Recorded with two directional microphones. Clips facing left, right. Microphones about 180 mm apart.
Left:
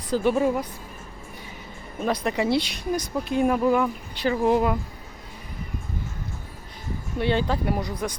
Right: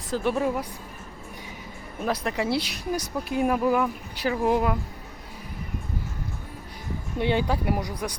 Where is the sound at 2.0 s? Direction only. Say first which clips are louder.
Left 3 dB; 5° right (ahead or behind).